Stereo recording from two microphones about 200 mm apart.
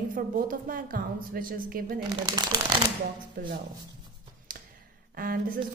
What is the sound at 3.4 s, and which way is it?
Speech, 50° right (ahead or behind).